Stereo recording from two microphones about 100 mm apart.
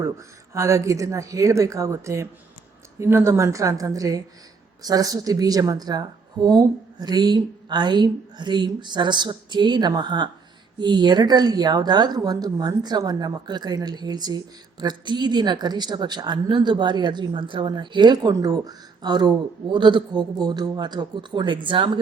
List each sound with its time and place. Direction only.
0.0 s a woman's voice: 30° right (ahead or behind); by 21.9 s 55° right (ahead or behind)